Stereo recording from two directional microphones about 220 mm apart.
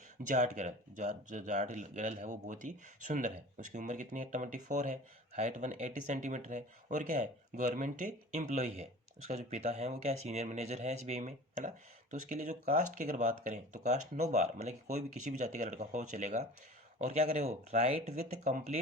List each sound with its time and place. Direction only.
0.2 s speech: 35° right (ahead or behind)